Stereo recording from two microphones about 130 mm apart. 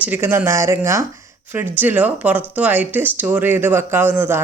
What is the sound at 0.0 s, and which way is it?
Speech, 15° right (ahead or behind).